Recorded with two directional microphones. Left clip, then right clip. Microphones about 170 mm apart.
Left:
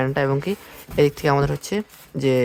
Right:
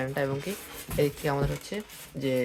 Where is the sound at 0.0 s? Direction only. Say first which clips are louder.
Left 9 dB; 45° left (ahead or behind).